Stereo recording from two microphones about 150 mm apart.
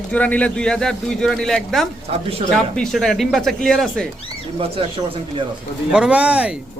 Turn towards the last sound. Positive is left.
turn(degrees=-10)  # may be behind; listen again after turning